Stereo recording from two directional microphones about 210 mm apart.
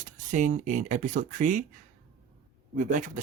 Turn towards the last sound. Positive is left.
turn(degrees=-40)  # may be behind; listen again after turning